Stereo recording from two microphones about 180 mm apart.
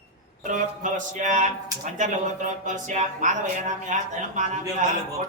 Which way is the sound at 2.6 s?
40° right (ahead or behind).